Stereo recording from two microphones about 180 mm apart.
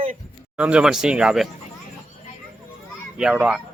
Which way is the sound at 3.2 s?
5° right (ahead or behind).